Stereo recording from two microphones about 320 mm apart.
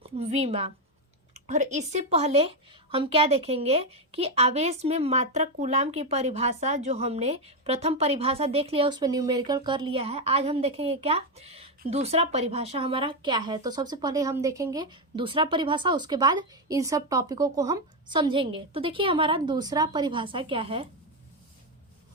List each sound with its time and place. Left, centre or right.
0.2 s a woman's voice: centre